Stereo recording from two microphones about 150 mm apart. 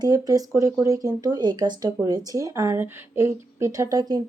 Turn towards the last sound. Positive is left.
turn(degrees=-25)  # may be behind; listen again after turning